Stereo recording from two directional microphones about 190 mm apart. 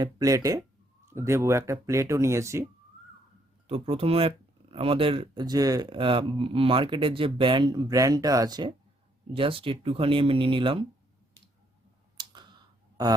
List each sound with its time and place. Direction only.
0.0 s speech: 20° right (ahead or behind)
3.7 s speech: 30° right (ahead or behind)
12.1 s a sound: 25° right (ahead or behind)